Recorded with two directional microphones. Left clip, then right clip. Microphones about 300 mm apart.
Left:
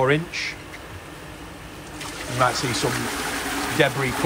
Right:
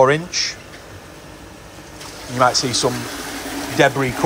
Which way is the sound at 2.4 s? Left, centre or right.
Centre.